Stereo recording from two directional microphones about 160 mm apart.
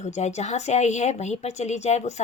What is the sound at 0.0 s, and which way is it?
A woman's voice, 45° left (ahead or behind).